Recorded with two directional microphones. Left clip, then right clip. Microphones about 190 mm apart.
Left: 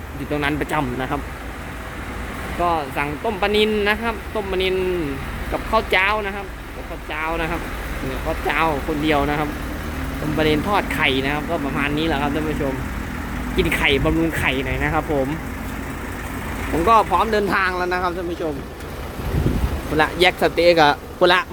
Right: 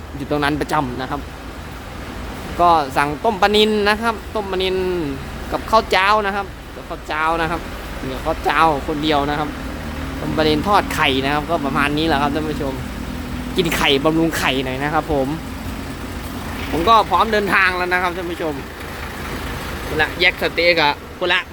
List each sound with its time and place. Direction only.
0.3 s speech: 15° right (ahead or behind)
2.6 s speech: 20° right (ahead or behind)
5.7 s speech: 15° right (ahead or behind)
13.6 s speech: 15° right (ahead or behind)
16.7 s speech: centre (ahead or behind)
20.0 s speech: 20° left (ahead or behind)